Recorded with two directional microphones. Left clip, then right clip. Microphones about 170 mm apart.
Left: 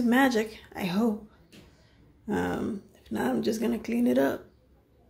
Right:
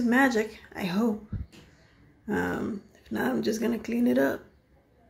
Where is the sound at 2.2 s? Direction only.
Centre (ahead or behind).